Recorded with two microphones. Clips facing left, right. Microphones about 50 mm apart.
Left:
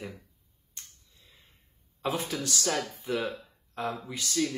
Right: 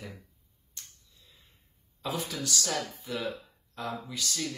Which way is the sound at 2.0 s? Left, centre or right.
Left.